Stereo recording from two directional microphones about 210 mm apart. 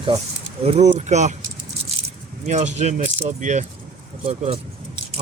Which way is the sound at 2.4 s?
35° right (ahead or behind).